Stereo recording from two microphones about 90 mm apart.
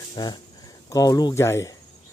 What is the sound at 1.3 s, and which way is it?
Speech, 30° left (ahead or behind).